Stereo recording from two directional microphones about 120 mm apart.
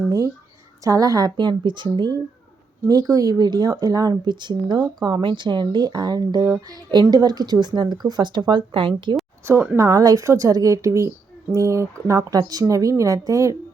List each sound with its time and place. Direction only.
0.9 s speech: 30° right (ahead or behind)
9.5 s speech: 20° right (ahead or behind)